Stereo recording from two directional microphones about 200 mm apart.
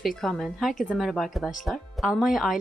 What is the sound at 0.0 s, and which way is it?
A woman's voice, centre (ahead or behind).